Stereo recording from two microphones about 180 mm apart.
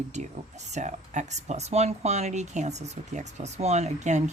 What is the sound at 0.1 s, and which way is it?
A woman's voice, 40° right (ahead or behind).